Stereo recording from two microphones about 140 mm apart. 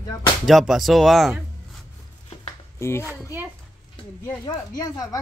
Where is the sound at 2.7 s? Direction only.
20° left (ahead or behind).